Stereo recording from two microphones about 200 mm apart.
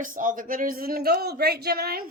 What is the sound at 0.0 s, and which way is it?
Speech, 40° right (ahead or behind).